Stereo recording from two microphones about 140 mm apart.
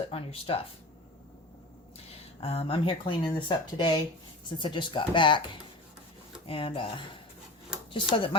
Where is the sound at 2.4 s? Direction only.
45° left (ahead or behind).